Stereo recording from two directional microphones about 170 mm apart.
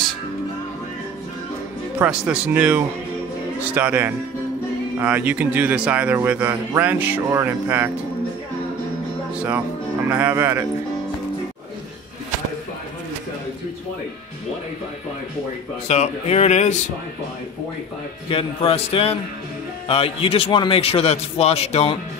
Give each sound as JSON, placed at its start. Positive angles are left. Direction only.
{"t": 2.0, "sound": "a man's voice", "side_deg": -5}
{"t": 10.0, "sound": "a man's voice", "side_deg": -10}
{"t": 15.9, "sound": "a man's voice", "side_deg": 40}
{"t": 18.3, "sound": "a man's voice", "side_deg": 35}